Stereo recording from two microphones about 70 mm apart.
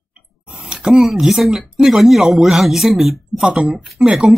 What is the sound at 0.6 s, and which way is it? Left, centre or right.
Speech, centre.